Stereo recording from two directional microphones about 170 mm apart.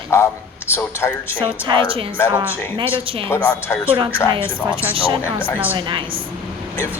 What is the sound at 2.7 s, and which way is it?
Speech, 30° right (ahead or behind).